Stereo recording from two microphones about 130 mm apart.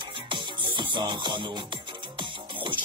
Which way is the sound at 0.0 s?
35° right (ahead or behind).